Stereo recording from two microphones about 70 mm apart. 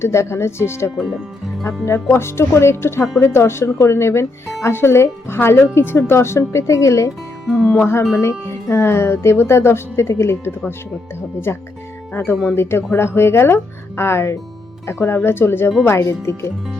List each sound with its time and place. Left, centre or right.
0.0 s speech: left
0.9 s speech: centre
1.6 s speech: left
7.4 s speech: centre
7.8 s speech: left